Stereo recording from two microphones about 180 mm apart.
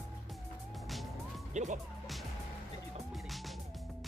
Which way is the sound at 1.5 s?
40° right (ahead or behind).